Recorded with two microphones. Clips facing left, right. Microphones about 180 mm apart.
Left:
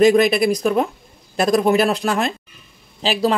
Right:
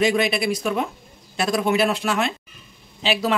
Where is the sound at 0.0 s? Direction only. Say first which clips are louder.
Left 7 dB; 40° left (ahead or behind).